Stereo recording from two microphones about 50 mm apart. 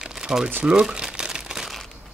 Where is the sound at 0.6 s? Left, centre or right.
Centre.